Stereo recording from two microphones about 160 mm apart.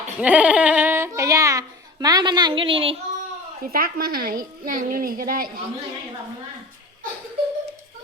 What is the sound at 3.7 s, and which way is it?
A woman's voice, 65° right (ahead or behind).